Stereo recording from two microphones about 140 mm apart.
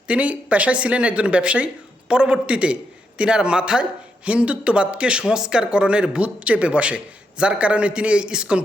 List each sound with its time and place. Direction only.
0.1 s speech: 10° right (ahead or behind)